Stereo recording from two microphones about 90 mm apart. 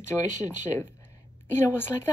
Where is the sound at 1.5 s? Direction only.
25° left (ahead or behind).